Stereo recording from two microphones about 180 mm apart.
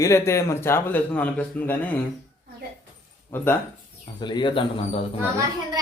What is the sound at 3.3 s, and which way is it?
Speech, 10° left (ahead or behind).